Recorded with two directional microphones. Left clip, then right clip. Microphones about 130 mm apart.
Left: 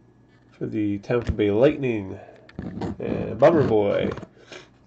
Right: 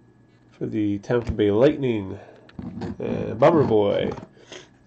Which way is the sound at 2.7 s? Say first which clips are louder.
Left 2 dB; 25° left (ahead or behind).